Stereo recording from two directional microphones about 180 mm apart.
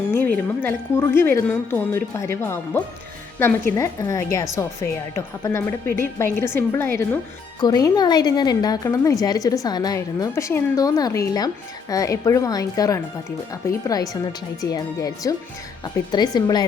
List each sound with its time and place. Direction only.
0.1 s a woman's voice: 10° left (ahead or behind)